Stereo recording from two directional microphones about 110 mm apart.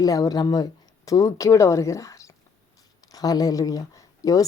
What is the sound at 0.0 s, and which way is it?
Speech, 35° left (ahead or behind).